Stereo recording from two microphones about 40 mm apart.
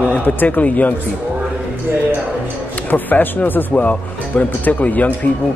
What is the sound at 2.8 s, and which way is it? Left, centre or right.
Speech, left.